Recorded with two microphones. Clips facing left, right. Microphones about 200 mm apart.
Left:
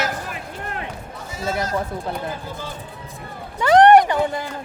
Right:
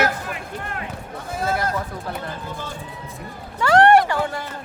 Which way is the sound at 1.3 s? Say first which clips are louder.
Right 1 dB; 60° right (ahead or behind).